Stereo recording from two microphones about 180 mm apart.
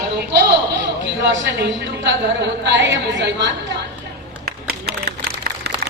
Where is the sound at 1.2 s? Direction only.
80° right.